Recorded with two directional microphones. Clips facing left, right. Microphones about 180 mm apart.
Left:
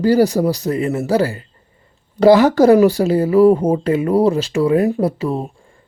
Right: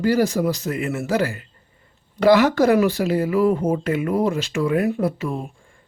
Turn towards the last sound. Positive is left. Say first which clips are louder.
# left 5 dB
turn(degrees=35)  # may be behind; listen again after turning